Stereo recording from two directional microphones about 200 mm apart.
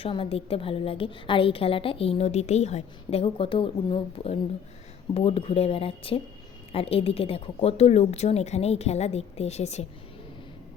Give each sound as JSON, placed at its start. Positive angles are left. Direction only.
{"t": 0.0, "sound": "a woman's voice", "side_deg": 25}